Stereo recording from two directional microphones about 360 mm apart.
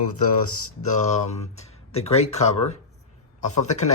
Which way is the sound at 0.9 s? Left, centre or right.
Centre.